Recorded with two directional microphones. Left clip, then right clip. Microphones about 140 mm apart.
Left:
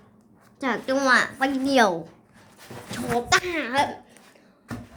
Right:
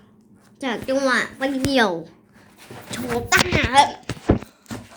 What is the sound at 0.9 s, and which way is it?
Speech, 15° right (ahead or behind).